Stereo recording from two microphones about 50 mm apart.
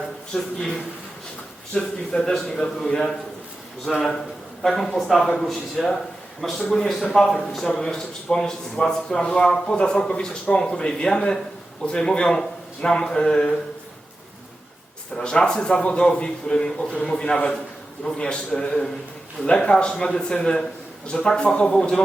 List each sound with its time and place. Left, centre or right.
0.3 s a man's voice: centre
15.1 s a man's voice: centre